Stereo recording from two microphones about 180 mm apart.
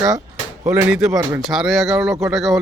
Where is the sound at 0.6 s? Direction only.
10° right (ahead or behind).